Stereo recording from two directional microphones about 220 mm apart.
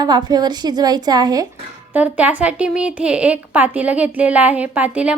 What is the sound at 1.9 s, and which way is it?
A woman's voice, 5° right (ahead or behind).